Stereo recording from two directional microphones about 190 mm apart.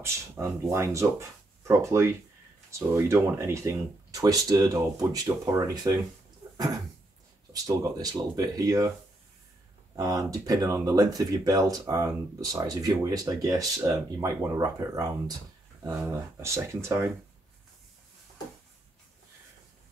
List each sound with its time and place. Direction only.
0.0 s speech: 15° right (ahead or behind)
7.5 s speech: 20° right (ahead or behind)
9.9 s speech: 20° right (ahead or behind)